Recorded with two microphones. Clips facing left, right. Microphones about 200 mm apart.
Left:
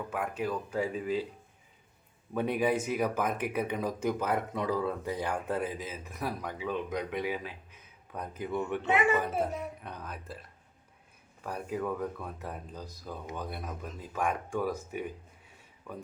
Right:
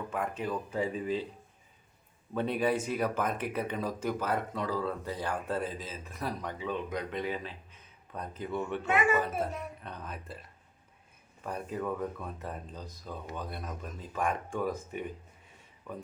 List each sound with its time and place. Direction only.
0.1 s speech: 5° left (ahead or behind)
2.3 s speech: 10° left (ahead or behind)
8.9 s speech: 25° left (ahead or behind)
10.0 s speech: centre (ahead or behind)
11.4 s speech: 5° left (ahead or behind)